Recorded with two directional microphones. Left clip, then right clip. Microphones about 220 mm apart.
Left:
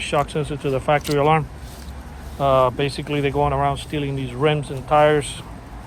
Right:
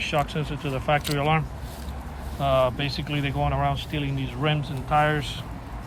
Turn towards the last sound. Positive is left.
turn(degrees=30)  # may be behind; listen again after turning